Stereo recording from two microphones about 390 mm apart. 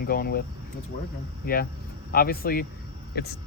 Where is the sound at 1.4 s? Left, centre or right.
Left.